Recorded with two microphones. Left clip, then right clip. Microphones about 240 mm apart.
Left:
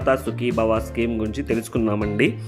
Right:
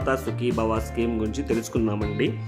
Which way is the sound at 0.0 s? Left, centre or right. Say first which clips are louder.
Left 4 dB; centre.